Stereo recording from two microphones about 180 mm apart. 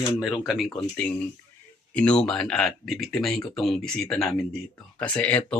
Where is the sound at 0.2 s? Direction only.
5° right (ahead or behind).